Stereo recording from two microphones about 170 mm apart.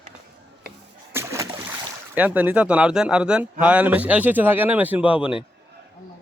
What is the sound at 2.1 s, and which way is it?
Speech, 10° right (ahead or behind).